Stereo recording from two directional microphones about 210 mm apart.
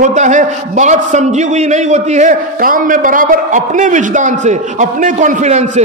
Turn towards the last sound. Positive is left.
turn(degrees=-35)  # may be behind; listen again after turning